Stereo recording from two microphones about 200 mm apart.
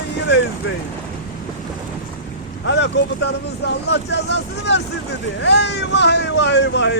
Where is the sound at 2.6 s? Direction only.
60° left (ahead or behind).